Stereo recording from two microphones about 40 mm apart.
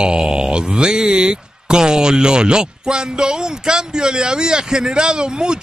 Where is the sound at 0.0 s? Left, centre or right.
Right.